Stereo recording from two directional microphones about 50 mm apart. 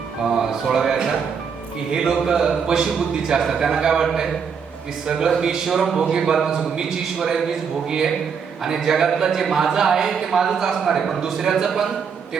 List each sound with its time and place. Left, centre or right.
0.3 s a man's voice: centre
5.0 s a man's voice: centre